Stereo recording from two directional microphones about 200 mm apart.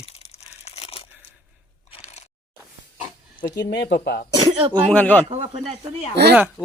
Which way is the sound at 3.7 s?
55° left (ahead or behind).